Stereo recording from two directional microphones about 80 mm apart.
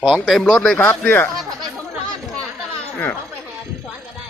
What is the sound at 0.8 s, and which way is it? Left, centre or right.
Speech, left.